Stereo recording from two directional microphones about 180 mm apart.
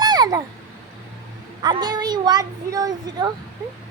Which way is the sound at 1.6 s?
20° right (ahead or behind).